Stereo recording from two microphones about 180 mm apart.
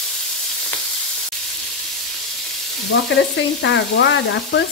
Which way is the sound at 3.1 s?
90° left.